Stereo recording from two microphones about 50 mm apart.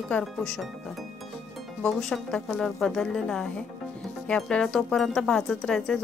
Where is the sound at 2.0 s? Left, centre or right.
Centre.